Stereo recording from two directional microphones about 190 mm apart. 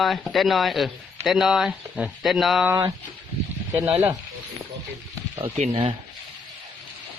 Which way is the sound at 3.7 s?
10° right (ahead or behind).